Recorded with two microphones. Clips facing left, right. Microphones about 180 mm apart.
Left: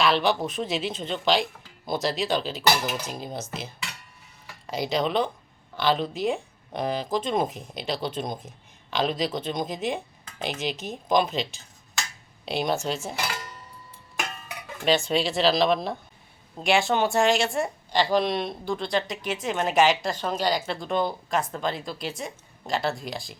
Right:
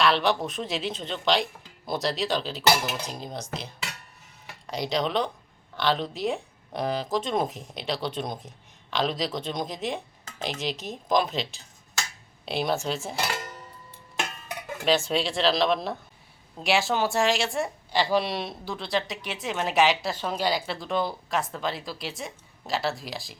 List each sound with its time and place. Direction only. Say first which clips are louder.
0.0 s speech: left 1 dB; centre (ahead or behind)
14.8 s speech: left 1 dB; centre (ahead or behind)